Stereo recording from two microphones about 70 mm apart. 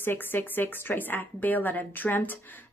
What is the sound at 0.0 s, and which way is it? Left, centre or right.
A woman's voice, left.